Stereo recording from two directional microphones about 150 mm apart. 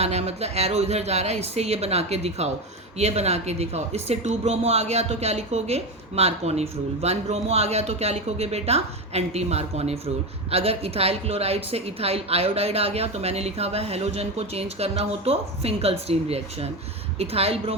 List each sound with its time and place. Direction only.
0.0 s speech: 45° right (ahead or behind)